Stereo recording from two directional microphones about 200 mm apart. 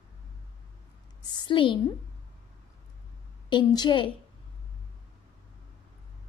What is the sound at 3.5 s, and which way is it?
Speech, 20° left (ahead or behind).